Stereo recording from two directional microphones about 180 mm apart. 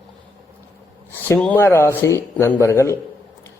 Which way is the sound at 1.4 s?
10° left (ahead or behind).